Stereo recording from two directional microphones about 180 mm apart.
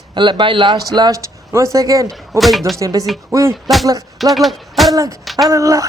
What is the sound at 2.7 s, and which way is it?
Speech, 20° right (ahead or behind).